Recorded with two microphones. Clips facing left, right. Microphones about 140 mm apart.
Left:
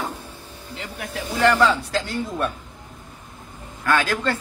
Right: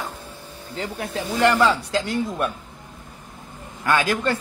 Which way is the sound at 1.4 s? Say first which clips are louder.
Even; 10° right (ahead or behind).